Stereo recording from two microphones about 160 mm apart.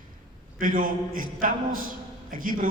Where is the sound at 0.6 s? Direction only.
55° right (ahead or behind).